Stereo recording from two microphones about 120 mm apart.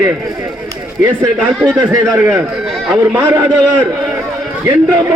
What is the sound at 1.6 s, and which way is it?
Speech, 35° right (ahead or behind).